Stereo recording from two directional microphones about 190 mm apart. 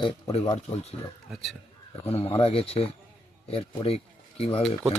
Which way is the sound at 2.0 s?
30° left (ahead or behind).